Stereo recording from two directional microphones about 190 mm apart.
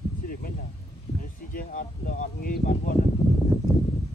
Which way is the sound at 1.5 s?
45° left (ahead or behind).